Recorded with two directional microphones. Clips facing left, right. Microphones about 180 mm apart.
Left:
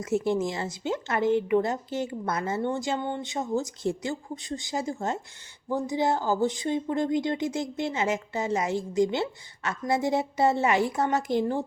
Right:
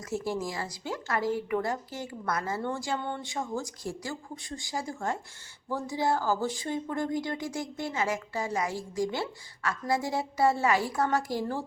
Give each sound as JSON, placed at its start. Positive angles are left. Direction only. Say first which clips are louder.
{"t": 0.0, "sound": "a woman's voice", "louder": "left 6 dB", "side_deg": 20}